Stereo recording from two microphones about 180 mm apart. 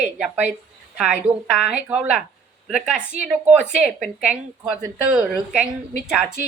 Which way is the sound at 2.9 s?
40° right (ahead or behind).